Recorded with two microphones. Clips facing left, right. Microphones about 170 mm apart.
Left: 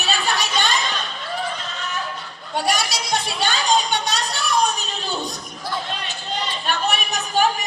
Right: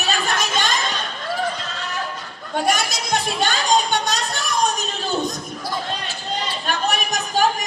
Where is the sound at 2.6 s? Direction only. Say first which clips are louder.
Right 1 dB; 50° right (ahead or behind).